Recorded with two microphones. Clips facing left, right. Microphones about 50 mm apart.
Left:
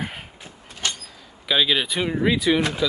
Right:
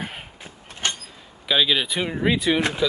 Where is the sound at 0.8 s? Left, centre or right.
Right.